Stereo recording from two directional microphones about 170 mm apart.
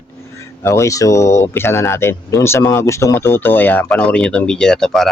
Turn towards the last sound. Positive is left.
turn(degrees=0)  # may be behind; listen again after turning